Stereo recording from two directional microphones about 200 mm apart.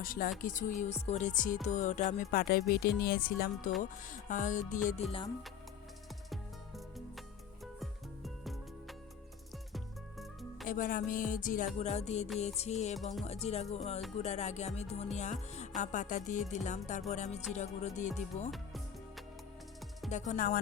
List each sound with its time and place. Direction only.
0.0 s music: 45° left (ahead or behind)
6.3 s music: centre (ahead or behind)
10.7 s music: 45° left (ahead or behind)
13.0 s music: centre (ahead or behind)
13.2 s music: 30° left (ahead or behind)
18.5 s music: centre (ahead or behind)
20.1 s music: 35° left (ahead or behind)